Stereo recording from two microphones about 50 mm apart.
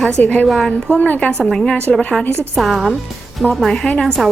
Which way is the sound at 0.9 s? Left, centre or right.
Left.